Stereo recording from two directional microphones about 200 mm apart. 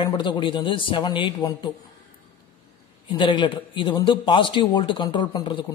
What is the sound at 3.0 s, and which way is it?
A man's voice, 25° left (ahead or behind).